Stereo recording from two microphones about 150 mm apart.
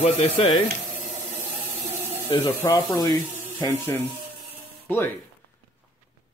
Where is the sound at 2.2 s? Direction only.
25° left (ahead or behind).